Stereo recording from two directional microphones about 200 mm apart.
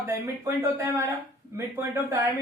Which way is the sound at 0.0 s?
10° right (ahead or behind).